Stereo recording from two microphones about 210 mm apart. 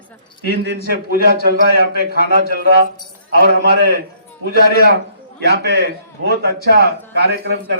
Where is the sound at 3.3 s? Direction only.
50° left (ahead or behind).